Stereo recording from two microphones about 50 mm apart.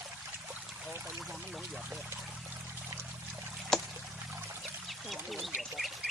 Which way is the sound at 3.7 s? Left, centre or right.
Centre.